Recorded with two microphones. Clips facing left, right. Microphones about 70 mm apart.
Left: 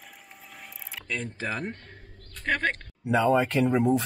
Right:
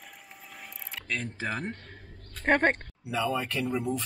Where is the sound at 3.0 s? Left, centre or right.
Left.